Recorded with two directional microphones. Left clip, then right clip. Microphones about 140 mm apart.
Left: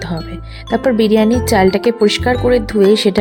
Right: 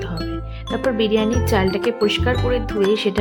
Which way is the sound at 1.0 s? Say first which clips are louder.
Left 6 dB; 50° left (ahead or behind).